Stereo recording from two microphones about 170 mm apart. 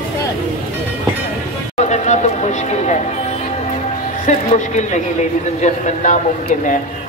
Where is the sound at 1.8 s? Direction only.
45° left (ahead or behind).